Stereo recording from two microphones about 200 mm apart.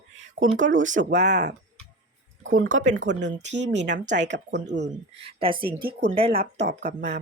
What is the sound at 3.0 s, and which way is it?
Speech, 65° right (ahead or behind).